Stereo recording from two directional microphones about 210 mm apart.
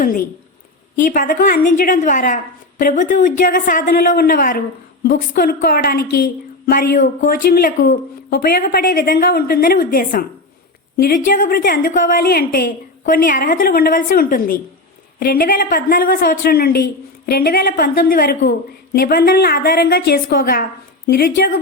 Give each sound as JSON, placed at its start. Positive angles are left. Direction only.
{"t": 0.9, "sound": "a woman's voice", "side_deg": 40}